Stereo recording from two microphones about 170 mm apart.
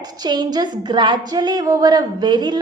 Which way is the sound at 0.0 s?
25° right (ahead or behind).